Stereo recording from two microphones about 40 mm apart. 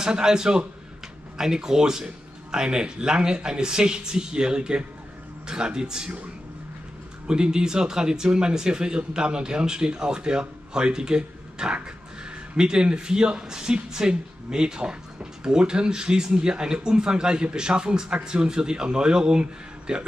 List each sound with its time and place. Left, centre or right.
0.0 s speech: centre
7.2 s speech: centre